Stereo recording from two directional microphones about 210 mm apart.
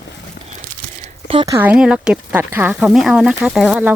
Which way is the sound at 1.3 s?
25° right (ahead or behind).